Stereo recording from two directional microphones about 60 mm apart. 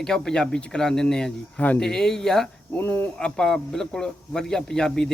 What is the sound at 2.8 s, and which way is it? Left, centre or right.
Speech, left.